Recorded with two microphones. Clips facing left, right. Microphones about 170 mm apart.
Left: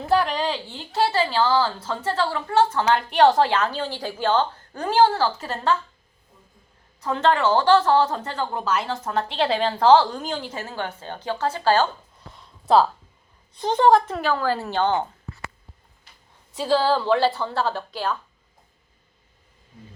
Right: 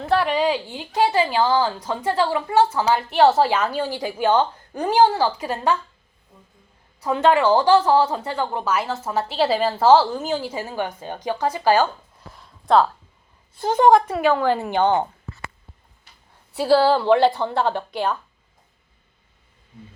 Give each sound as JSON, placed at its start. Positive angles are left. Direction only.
{"t": 0.1, "sound": "a woman's voice", "side_deg": -5}
{"t": 7.0, "sound": "a woman's voice", "side_deg": -10}
{"t": 12.6, "sound": "speech", "side_deg": 5}
{"t": 13.6, "sound": "a woman's voice", "side_deg": -10}
{"t": 16.6, "sound": "a woman's voice", "side_deg": -10}